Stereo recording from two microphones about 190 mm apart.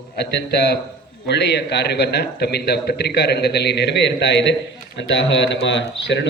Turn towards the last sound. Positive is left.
turn(degrees=70)  # may be behind; listen again after turning